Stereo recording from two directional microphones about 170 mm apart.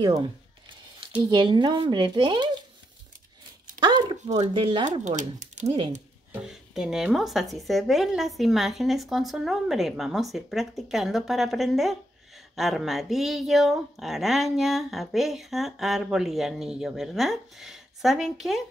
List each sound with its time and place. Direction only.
1.3 s speech: 30° right (ahead or behind)
3.8 s speech: 25° right (ahead or behind)
5.0 s speech: 45° right (ahead or behind)
6.4 s speech: 5° right (ahead or behind)